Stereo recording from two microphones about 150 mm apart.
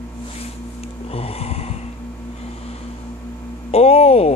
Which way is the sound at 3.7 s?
45° left (ahead or behind).